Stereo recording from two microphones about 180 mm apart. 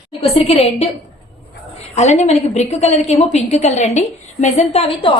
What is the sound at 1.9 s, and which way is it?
A woman's voice, 40° left (ahead or behind).